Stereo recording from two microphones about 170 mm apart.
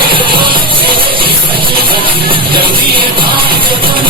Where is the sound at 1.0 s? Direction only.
30° right (ahead or behind).